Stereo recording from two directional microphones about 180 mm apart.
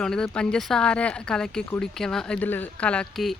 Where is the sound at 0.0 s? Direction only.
5° left (ahead or behind).